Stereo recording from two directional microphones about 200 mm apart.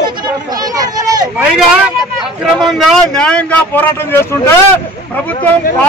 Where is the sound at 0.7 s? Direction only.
20° right (ahead or behind).